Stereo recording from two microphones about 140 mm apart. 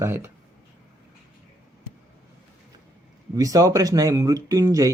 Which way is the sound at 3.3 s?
25° right (ahead or behind).